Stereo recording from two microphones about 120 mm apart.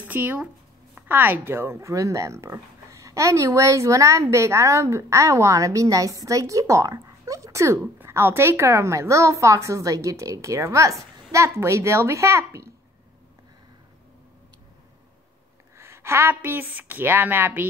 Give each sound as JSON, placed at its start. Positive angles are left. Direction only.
{"t": 0.0, "sound": "speech", "side_deg": -15}
{"t": 15.8, "sound": "a woman's voice", "side_deg": -20}